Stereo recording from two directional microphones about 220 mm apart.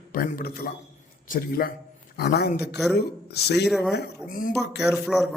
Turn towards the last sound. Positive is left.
turn(degrees=0)  # may be behind; listen again after turning